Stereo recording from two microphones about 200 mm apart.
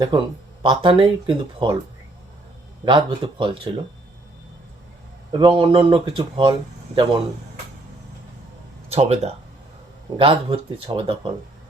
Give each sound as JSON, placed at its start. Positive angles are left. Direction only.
{"t": 0.1, "sound": "speech", "side_deg": -20}
{"t": 2.8, "sound": "speech", "side_deg": -25}
{"t": 5.4, "sound": "speech", "side_deg": -25}
{"t": 8.9, "sound": "speech", "side_deg": -30}